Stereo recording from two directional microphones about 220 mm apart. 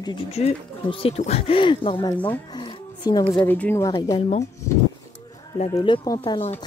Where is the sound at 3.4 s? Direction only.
10° left (ahead or behind).